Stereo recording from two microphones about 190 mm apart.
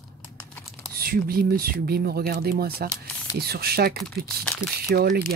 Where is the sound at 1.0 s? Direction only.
50° right (ahead or behind).